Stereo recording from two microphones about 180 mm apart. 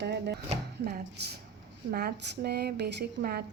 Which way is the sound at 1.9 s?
55° right (ahead or behind).